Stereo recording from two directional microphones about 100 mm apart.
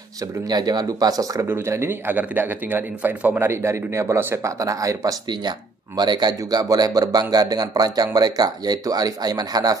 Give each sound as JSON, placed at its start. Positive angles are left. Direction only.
{"t": 0.5, "sound": "speech", "side_deg": -45}
{"t": 1.5, "sound": "a man's voice", "side_deg": -25}